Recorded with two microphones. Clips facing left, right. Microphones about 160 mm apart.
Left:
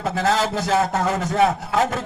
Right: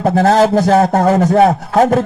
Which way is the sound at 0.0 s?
45° right (ahead or behind).